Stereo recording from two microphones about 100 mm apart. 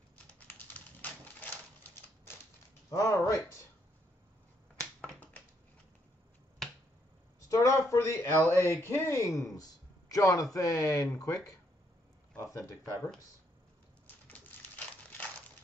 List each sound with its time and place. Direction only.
1.0 s typewriter: 15° left (ahead or behind)
2.9 s speech: 30° left (ahead or behind)
5.0 s finger snapping: 15° left (ahead or behind)
6.6 s finger snapping: centre (ahead or behind)
7.4 s speech: 30° left (ahead or behind)
14.5 s a sound: 20° left (ahead or behind)